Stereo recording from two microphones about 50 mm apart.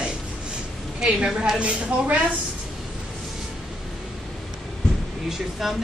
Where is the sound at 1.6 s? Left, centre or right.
Right.